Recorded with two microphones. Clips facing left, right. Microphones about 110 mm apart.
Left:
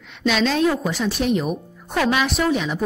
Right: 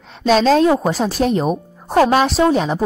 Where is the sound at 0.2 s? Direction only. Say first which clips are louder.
Right 6 dB; 40° right (ahead or behind).